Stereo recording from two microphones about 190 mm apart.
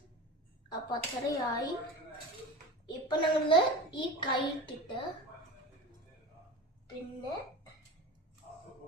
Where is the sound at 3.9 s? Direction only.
25° left (ahead or behind).